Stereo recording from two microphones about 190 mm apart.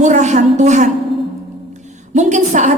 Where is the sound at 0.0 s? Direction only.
40° right (ahead or behind).